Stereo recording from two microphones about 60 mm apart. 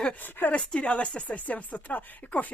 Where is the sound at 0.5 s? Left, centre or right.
Centre.